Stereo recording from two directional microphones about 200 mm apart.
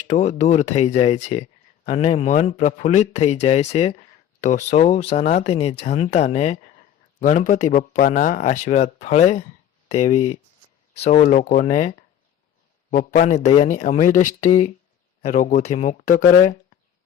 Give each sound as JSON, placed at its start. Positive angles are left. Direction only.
{"t": 0.1, "sound": "speech", "side_deg": 35}